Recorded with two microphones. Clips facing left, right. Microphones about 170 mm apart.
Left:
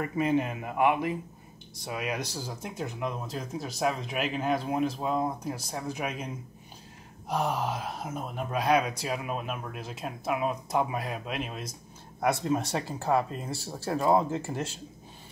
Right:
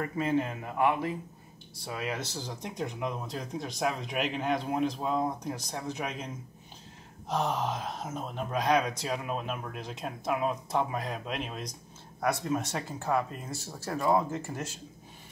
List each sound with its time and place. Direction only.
0.0 s speech: 15° left (ahead or behind)
12.2 s speech: 30° left (ahead or behind)